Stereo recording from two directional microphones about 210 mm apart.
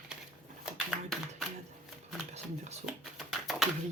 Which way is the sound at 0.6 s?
Centre (ahead or behind).